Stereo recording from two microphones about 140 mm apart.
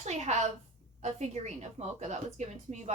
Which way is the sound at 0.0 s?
55° right (ahead or behind).